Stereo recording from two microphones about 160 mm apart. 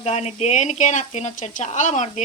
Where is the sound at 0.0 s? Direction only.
45° left (ahead or behind).